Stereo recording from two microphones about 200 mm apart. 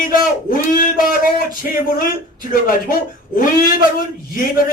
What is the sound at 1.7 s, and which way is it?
Speech, 45° left (ahead or behind).